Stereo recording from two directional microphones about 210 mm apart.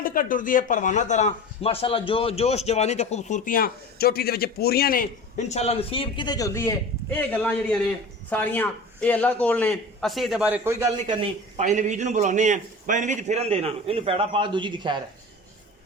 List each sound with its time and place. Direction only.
0.0 s a man's voice: 40° left (ahead or behind); by 11.2 s 15° right (ahead or behind)
11.2 s a man's voice: 35° right (ahead or behind)